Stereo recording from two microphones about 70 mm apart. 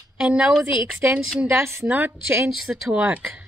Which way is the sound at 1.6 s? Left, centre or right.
Right.